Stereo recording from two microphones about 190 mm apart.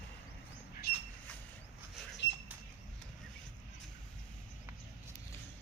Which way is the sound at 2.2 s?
70° left (ahead or behind).